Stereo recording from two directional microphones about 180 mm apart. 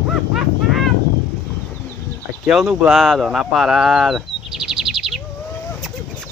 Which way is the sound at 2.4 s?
5° right (ahead or behind).